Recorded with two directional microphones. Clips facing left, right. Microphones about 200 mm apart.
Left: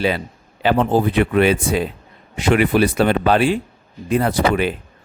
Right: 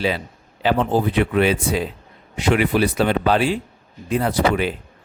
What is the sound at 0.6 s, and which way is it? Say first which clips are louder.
Speech: left 2 dB; 55° left (ahead or behind).